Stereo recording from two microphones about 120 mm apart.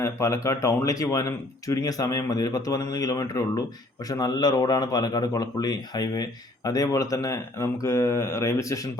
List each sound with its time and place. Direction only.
0.0 s speech: 25° left (ahead or behind)